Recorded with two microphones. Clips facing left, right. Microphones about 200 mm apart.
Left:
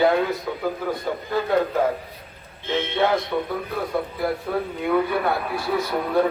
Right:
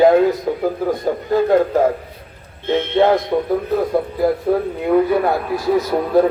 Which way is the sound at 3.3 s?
30° right (ahead or behind).